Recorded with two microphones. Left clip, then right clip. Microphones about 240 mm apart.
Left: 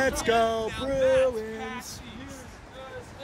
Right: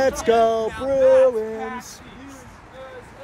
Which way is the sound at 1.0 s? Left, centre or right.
Right.